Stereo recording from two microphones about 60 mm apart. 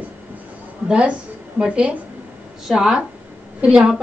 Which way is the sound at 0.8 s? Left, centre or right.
Centre.